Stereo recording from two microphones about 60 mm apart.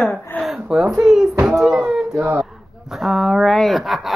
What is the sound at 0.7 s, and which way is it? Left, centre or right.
Speech, centre.